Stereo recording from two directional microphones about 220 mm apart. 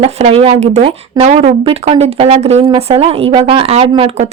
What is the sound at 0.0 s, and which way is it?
Speech, 30° right (ahead or behind).